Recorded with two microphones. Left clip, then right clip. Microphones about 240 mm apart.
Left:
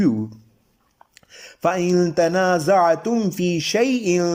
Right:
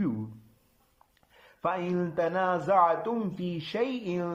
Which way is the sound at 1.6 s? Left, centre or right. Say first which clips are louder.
Left 11 dB; left.